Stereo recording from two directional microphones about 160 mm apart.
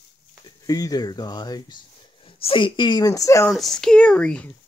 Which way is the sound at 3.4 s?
Centre (ahead or behind).